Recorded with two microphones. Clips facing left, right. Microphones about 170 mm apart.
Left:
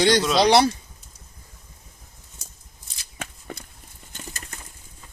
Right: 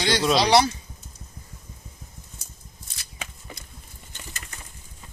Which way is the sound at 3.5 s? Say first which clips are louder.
Left 6 dB; 55° left (ahead or behind).